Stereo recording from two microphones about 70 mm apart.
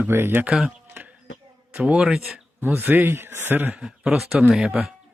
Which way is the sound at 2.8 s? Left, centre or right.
Right.